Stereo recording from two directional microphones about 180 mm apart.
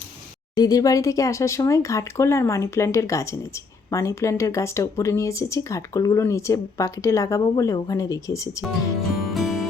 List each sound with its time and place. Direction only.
0.5 s speech: 20° left (ahead or behind)
9.3 s music: centre (ahead or behind)